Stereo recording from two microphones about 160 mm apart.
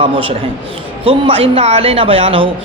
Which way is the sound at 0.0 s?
35° right (ahead or behind).